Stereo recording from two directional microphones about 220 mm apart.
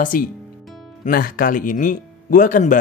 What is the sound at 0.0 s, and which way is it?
Speech, 40° left (ahead or behind).